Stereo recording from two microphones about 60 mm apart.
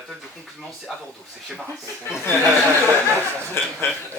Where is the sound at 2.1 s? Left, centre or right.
Left.